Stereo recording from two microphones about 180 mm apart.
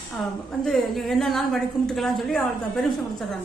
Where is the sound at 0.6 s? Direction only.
Centre (ahead or behind).